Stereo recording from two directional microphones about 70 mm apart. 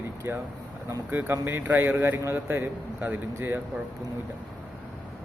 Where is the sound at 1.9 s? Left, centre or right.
Right.